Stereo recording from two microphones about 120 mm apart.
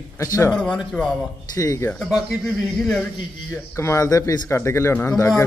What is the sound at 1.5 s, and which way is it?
Speech, 25° left (ahead or behind).